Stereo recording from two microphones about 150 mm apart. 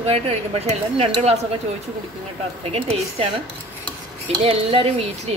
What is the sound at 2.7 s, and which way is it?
Speech, 40° right (ahead or behind).